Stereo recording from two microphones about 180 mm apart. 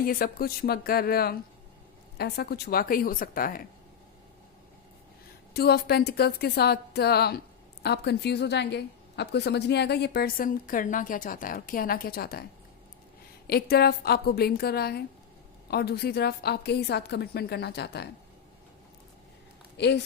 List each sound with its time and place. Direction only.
0.0 s a woman's voice: 55° left (ahead or behind)
5.5 s a woman's voice: 60° left (ahead or behind)
13.5 s a woman's voice: 60° left (ahead or behind)
19.7 s speech: 70° left (ahead or behind)